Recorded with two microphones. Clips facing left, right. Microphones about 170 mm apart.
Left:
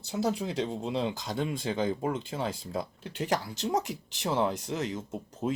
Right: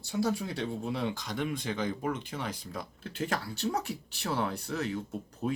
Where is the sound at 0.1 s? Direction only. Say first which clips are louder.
Left 1 dB; 20° left (ahead or behind).